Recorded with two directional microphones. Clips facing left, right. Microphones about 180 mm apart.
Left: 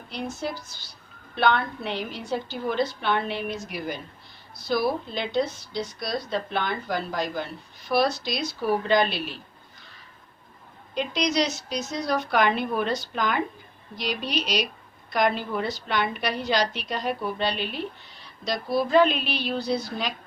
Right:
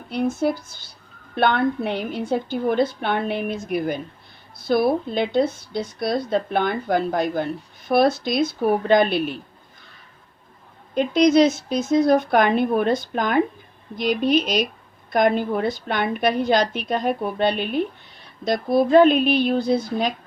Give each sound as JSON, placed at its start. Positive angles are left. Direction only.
{"t": 0.1, "sound": "a woman's voice", "side_deg": -55}
{"t": 10.9, "sound": "a woman's voice", "side_deg": -50}